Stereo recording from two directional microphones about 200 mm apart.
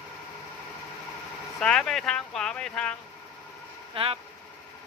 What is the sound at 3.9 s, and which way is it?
Speech, 30° right (ahead or behind).